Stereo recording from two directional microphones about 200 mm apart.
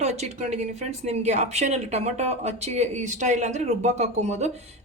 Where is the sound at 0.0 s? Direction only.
35° right (ahead or behind).